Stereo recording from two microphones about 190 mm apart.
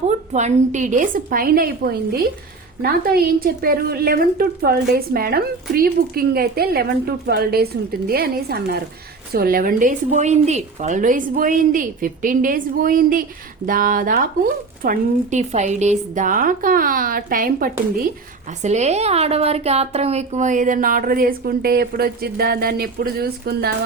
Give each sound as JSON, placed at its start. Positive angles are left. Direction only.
{"t": 0.3, "sound": "a woman's voice", "side_deg": -40}
{"t": 18.6, "sound": "a woman's voice", "side_deg": -35}